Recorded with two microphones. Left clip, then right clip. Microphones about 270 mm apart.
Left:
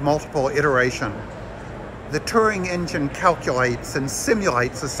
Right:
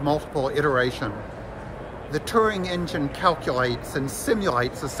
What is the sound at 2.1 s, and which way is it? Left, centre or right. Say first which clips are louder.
Speech: left 3 dB; centre.